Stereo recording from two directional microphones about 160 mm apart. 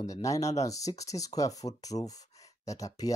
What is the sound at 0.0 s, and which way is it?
Speech, 20° left (ahead or behind).